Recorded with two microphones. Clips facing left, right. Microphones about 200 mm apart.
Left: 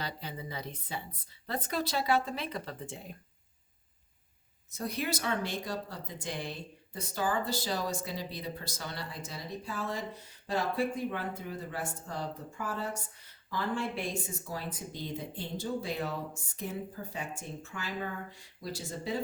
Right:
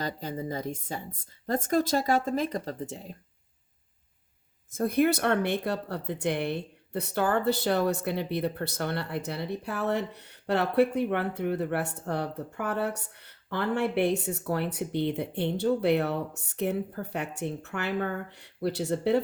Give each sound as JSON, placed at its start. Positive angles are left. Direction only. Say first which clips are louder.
{"t": 0.0, "sound": "speech", "louder": "right 7 dB", "side_deg": -45}
{"t": 4.7, "sound": "speech", "louder": "right 11 dB", "side_deg": -55}